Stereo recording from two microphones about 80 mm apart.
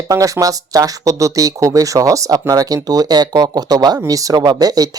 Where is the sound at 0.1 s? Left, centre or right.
Right.